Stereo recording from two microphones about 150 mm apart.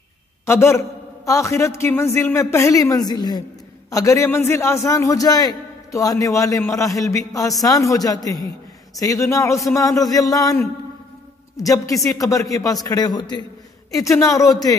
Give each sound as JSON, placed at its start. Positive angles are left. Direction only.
{"t": 0.5, "sound": "a man's voice", "side_deg": 20}